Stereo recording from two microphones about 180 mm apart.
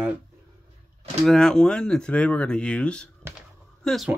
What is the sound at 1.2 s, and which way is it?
Speech, centre (ahead or behind).